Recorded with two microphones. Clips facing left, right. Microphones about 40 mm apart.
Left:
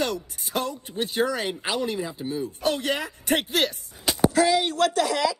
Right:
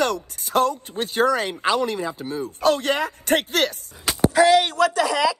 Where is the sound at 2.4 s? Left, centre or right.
Right.